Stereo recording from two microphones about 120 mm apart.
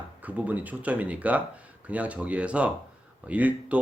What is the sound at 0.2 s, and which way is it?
Speech, 15° right (ahead or behind).